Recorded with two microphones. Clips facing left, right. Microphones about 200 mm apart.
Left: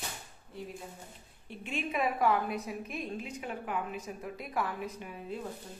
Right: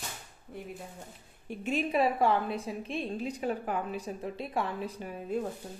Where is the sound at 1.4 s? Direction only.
40° right (ahead or behind).